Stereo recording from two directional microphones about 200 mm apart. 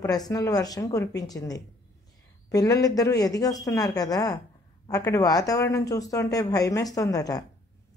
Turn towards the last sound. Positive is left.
turn(degrees=15)  # may be behind; listen again after turning